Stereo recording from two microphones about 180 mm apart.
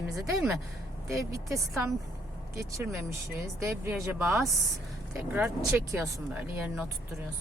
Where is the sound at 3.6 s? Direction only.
10° right (ahead or behind).